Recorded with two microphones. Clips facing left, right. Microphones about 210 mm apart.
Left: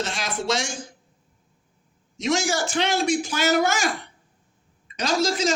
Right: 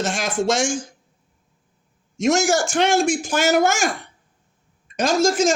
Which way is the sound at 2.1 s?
45° right (ahead or behind).